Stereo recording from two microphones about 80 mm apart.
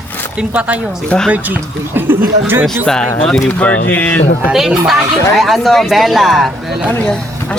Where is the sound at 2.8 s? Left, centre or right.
Centre.